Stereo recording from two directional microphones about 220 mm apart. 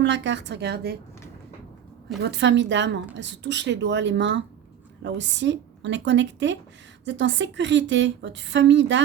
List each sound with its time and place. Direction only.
0.0 s a woman's voice: 55° right (ahead or behind)
2.2 s a woman's voice: 50° right (ahead or behind)